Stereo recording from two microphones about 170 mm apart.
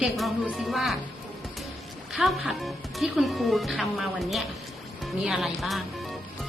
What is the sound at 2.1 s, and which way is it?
Speech, centre (ahead or behind).